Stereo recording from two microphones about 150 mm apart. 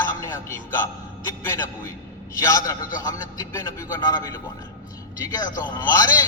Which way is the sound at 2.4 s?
20° left (ahead or behind).